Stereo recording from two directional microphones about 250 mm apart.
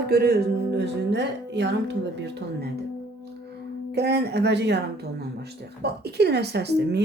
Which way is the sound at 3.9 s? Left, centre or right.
Right.